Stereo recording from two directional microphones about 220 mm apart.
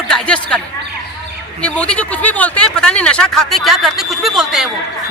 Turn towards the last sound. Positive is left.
turn(degrees=0)  # may be behind; listen again after turning